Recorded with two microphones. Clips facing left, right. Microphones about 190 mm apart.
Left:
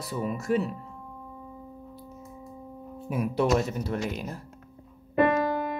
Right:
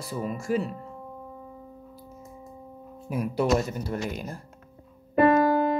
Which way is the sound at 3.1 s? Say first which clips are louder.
Even; centre (ahead or behind).